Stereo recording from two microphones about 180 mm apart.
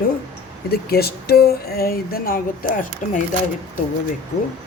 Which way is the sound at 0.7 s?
60° left (ahead or behind).